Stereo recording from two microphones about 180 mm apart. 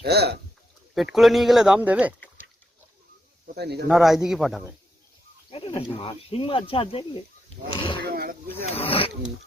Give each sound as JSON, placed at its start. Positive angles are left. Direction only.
{"t": 0.0, "sound": "speech", "side_deg": -65}
{"t": 0.9, "sound": "speech", "side_deg": 0}
{"t": 3.4, "sound": "speech", "side_deg": -65}
{"t": 3.8, "sound": "speech", "side_deg": 0}
{"t": 5.5, "sound": "speech", "side_deg": 30}
{"t": 8.0, "sound": "a sound", "side_deg": -60}
{"t": 8.8, "sound": "speech", "side_deg": 30}